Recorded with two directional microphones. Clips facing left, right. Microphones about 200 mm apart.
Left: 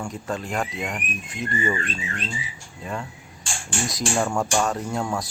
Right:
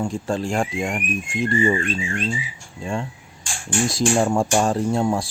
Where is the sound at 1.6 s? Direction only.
30° right (ahead or behind).